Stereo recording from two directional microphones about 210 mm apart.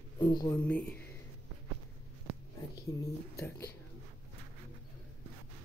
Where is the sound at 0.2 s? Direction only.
20° left (ahead or behind).